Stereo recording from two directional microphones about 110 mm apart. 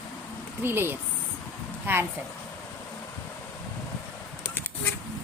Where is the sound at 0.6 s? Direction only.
20° right (ahead or behind).